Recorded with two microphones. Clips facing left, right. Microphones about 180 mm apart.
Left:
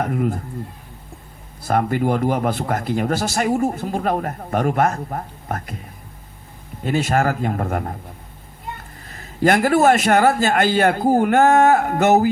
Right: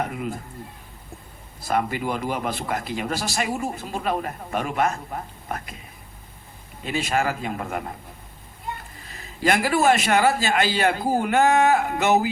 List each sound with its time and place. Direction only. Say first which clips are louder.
0.0 s speech: left 7 dB; 50° left (ahead or behind)
1.6 s speech: left 5 dB; 50° left (ahead or behind)
6.8 s speech: left 5 dB; 50° left (ahead or behind)
9.1 s speech: left 5 dB; 50° left (ahead or behind)